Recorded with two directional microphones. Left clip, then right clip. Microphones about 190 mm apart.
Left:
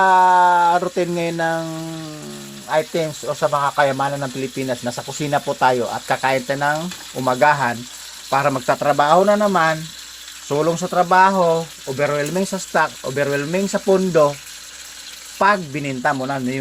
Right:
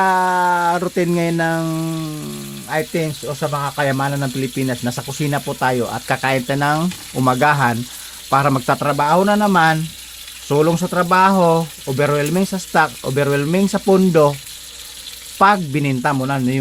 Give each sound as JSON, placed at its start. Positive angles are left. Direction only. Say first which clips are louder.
{"t": 0.0, "sound": "frying", "louder": "left 3 dB", "side_deg": -20}
{"t": 3.2, "sound": "speech", "louder": "left 3 dB", "side_deg": -20}
{"t": 5.2, "sound": "speech", "louder": "left 2 dB", "side_deg": -5}
{"t": 5.8, "sound": "speech", "louder": "even", "side_deg": -15}
{"t": 10.5, "sound": "speech", "louder": "right 2 dB", "side_deg": -25}
{"t": 12.4, "sound": "speech", "louder": "right 2 dB", "side_deg": -10}
{"t": 12.8, "sound": "speech", "louder": "right 5 dB", "side_deg": -20}
{"t": 15.4, "sound": "speech", "louder": "right 3 dB", "side_deg": -20}